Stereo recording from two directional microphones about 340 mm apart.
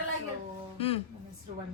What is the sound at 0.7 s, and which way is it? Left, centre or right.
Music, centre.